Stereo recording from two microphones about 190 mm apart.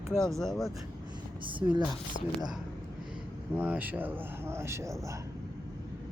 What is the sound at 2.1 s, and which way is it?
Speech, 40° left (ahead or behind).